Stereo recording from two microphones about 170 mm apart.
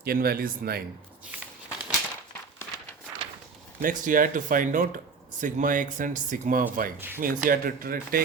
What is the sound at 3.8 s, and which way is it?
Speech, 50° right (ahead or behind).